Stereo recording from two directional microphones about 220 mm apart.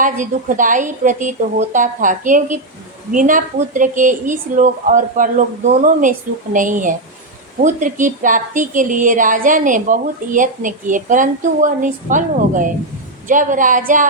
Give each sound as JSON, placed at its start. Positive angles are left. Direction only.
{"t": 0.0, "sound": "speech", "side_deg": -35}